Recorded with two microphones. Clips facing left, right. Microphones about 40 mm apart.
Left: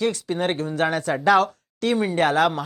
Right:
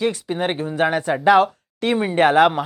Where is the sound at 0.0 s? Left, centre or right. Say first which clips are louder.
Right 1 dB; centre.